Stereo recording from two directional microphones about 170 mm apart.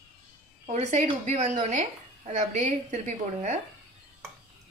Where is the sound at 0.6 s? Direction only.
40° right (ahead or behind).